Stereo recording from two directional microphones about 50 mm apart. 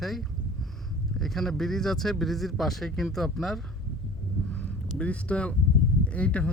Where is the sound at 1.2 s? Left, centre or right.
Centre.